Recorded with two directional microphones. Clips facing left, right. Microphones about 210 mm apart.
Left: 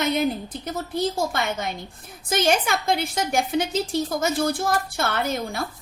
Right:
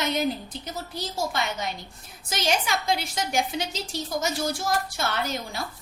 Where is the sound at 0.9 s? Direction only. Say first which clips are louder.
Left 5 dB; 55° left (ahead or behind).